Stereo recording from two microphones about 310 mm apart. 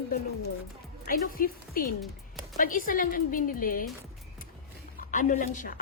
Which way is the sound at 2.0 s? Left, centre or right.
Centre.